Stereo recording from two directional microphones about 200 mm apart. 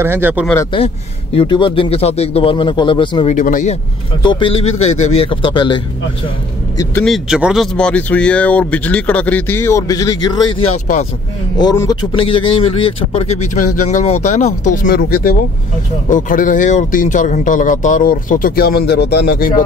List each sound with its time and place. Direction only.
0.0 s speech: 10° right (ahead or behind)
0.7 s a man's voice: 30° left (ahead or behind)
3.3 s speech: 40° left (ahead or behind)
4.2 s a man's voice: 25° left (ahead or behind)
7.0 s speech: centre (ahead or behind); by 14.9 s 35° left (ahead or behind)
14.9 s speech: 50° left (ahead or behind)